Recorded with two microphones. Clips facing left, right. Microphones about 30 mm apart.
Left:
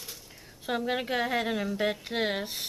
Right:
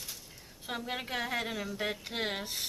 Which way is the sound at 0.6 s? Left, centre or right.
Centre.